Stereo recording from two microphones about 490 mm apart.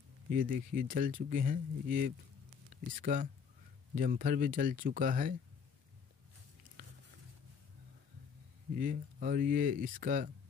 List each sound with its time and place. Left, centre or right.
0.3 s speech: centre
8.7 s speech: centre